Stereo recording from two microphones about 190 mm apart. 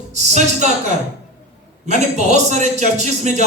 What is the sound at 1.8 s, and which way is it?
A man's voice, 40° right (ahead or behind).